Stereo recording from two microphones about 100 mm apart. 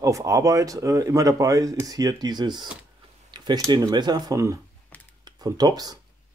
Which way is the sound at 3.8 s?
45° right (ahead or behind).